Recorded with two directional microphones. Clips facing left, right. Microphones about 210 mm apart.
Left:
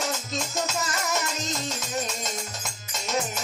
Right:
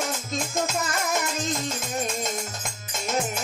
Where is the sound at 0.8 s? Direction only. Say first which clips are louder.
Right 2 dB; 55° right (ahead or behind).